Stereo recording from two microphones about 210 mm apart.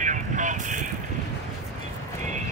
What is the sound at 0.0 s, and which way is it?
Vehicle, 35° right (ahead or behind).